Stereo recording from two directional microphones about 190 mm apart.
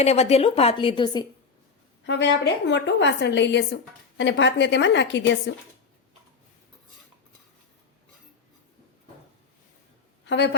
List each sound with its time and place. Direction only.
0.0 s a woman's voice: 35° left (ahead or behind)
2.0 s a woman's voice: 65° left (ahead or behind)
10.2 s a woman's voice: 65° left (ahead or behind)